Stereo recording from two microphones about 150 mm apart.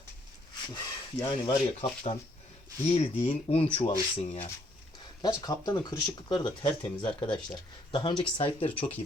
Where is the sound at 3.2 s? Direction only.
40° left (ahead or behind).